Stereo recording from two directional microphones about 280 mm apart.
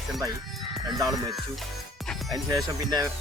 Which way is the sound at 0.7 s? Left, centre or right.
Centre.